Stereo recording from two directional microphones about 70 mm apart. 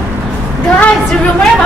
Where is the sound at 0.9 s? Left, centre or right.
Centre.